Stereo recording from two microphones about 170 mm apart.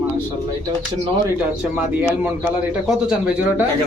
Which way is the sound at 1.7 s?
10° right (ahead or behind).